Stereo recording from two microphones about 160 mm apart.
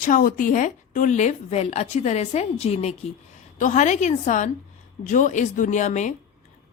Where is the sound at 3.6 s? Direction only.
50° left (ahead or behind).